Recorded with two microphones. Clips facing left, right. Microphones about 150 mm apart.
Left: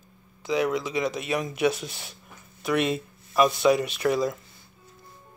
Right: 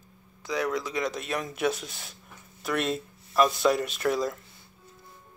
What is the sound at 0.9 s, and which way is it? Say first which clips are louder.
Speech: left 3 dB; 5° left (ahead or behind).